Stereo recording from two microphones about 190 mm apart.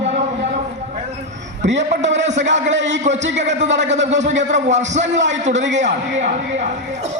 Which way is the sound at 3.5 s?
40° right (ahead or behind).